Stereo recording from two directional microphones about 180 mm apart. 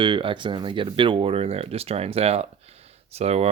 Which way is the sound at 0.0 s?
30° right (ahead or behind).